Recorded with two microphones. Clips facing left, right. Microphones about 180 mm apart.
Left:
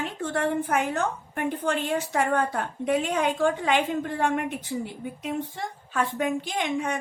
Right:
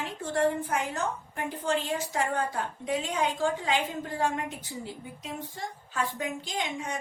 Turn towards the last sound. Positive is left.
turn(degrees=60)  # may be behind; listen again after turning